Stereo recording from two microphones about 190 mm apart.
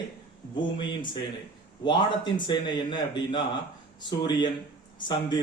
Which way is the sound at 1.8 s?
25° left (ahead or behind).